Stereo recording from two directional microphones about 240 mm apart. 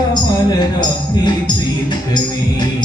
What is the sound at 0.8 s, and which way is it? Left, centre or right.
Music, centre.